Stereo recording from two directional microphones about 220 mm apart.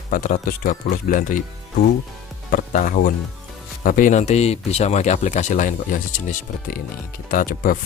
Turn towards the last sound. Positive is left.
turn(degrees=40)  # may be behind; listen again after turning